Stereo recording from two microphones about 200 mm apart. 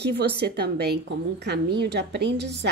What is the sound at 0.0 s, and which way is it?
A woman's voice, 55° right (ahead or behind).